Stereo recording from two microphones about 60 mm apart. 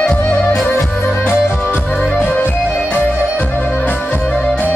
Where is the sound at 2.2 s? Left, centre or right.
Left.